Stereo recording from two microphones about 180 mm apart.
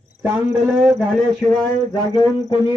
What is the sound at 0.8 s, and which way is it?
Speech, centre (ahead or behind).